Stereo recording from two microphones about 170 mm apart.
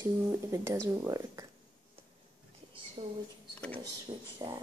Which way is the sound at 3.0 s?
30° right (ahead or behind).